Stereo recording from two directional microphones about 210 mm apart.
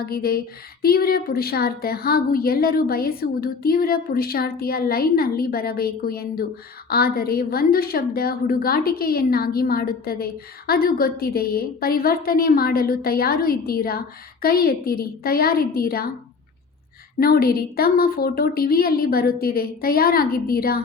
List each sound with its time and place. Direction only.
0.0 s a woman's voice: 45° left (ahead or behind)
17.2 s a woman's voice: 45° left (ahead or behind)